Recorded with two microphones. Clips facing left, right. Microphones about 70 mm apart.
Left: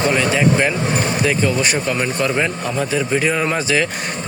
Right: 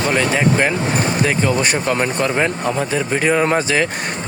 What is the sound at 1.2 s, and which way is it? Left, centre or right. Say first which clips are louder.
A man's voice: even; right.